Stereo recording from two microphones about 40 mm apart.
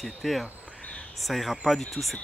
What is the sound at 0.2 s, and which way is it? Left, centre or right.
Speech, centre.